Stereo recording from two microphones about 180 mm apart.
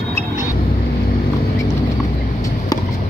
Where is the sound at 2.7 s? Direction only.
20° left (ahead or behind).